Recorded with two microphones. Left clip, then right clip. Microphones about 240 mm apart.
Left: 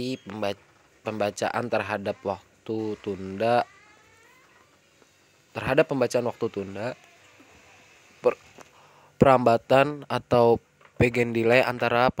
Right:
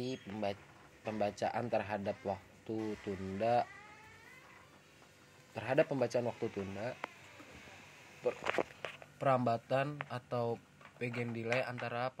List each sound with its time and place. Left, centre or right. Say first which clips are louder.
0.0 s speech: left 9 dB; left
5.5 s speech: left 10 dB; left
8.2 s speech: left 9 dB; left